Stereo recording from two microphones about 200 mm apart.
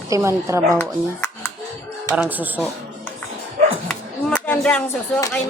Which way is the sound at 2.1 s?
10° right (ahead or behind).